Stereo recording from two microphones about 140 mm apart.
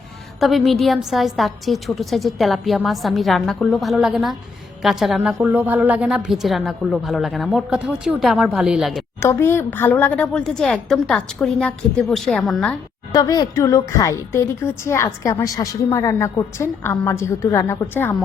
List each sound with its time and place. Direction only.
0.3 s a woman's voice: centre (ahead or behind)
9.2 s a woman's voice: 20° left (ahead or behind); by 12.7 s centre (ahead or behind)
13.1 s a woman's voice: 25° left (ahead or behind)